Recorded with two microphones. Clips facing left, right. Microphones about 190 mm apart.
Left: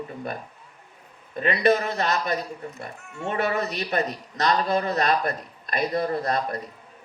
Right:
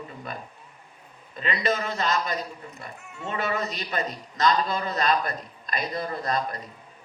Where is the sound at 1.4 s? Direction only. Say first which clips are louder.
Left 6 dB; 60° left (ahead or behind).